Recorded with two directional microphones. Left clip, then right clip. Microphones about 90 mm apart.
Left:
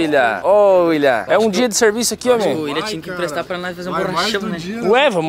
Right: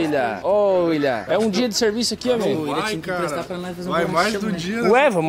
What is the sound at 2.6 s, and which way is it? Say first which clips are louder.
Speech: left 1 dB; 20° left (ahead or behind).